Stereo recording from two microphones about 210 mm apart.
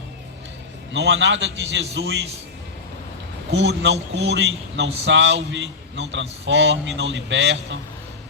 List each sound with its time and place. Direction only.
0.9 s a man's voice: 60° right (ahead or behind)
3.5 s a man's voice: 60° right (ahead or behind)